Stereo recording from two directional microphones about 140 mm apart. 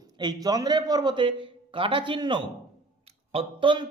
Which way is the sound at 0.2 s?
30° right (ahead or behind).